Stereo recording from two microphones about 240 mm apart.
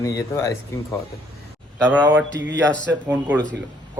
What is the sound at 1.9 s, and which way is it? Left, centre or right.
Speech, centre.